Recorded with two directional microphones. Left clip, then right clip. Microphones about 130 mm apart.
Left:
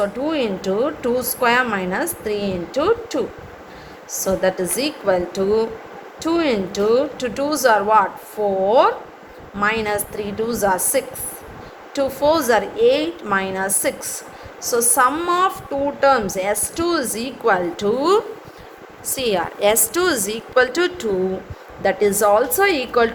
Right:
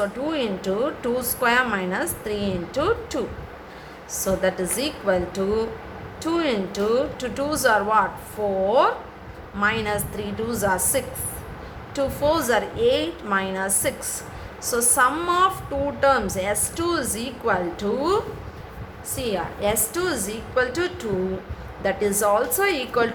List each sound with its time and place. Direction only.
0.0 s a woman's voice: 30° left (ahead or behind)
12.2 s a woman's voice: 35° left (ahead or behind)
17.4 s a woman's voice: 70° left (ahead or behind)
21.8 s a woman's voice: 45° left (ahead or behind)